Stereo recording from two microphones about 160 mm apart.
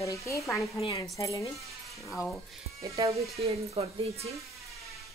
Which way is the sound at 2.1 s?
Centre (ahead or behind).